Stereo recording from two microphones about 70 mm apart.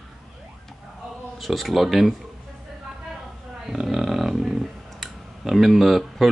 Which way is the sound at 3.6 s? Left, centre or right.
Centre.